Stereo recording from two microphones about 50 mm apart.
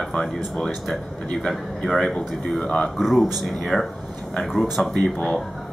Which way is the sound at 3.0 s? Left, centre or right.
Centre.